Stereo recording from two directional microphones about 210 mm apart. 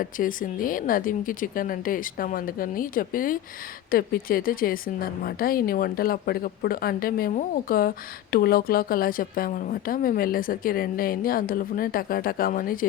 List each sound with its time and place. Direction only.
0.0 s a woman's voice: 40° left (ahead or behind)